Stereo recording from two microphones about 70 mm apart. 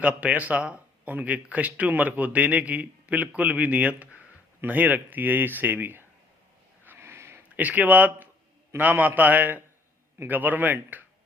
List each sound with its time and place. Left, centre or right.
0.0 s a man's voice: centre
6.8 s a sound: right
7.5 s speech: right